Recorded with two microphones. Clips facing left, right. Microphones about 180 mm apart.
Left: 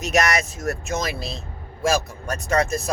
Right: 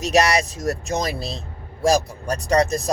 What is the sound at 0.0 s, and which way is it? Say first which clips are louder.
Speech: right 3 dB; 35° right (ahead or behind).